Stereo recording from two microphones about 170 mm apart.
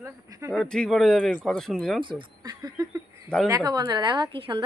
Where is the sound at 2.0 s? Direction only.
30° right (ahead or behind).